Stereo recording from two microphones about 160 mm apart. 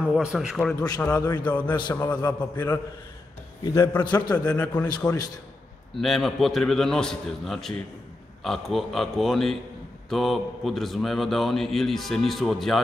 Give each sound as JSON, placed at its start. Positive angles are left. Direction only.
{"t": 0.0, "sound": "a man's voice", "side_deg": -5}
{"t": 0.7, "sound": "a man's voice", "side_deg": 20}
{"t": 1.5, "sound": "a man's voice", "side_deg": 10}
{"t": 3.6, "sound": "a man's voice", "side_deg": 20}
{"t": 4.8, "sound": "a man's voice", "side_deg": 25}
{"t": 5.9, "sound": "a man's voice", "side_deg": 0}